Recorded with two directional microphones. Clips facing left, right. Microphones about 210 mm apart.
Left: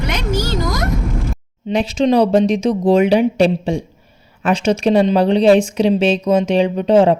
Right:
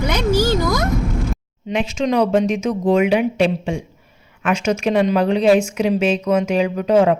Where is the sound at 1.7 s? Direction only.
35° left (ahead or behind).